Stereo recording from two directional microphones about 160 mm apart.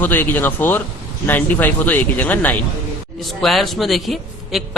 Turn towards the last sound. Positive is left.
turn(degrees=0)  # may be behind; listen again after turning